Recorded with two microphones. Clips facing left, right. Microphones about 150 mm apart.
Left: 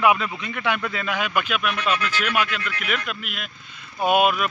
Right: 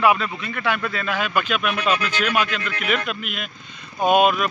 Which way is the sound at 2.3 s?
10° left (ahead or behind).